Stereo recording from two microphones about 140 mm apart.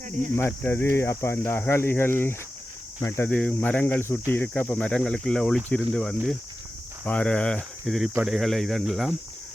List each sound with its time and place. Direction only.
0.3 s speech: 15° left (ahead or behind); by 9.1 s centre (ahead or behind)